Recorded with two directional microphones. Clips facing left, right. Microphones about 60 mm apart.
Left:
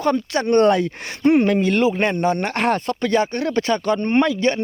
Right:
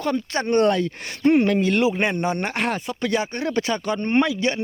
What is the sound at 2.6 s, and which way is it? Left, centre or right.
Speech, centre.